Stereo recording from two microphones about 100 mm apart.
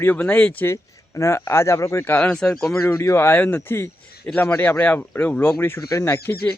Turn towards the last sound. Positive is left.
turn(degrees=20)  # may be behind; listen again after turning